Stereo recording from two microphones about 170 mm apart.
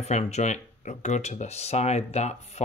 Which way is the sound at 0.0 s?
40° left (ahead or behind).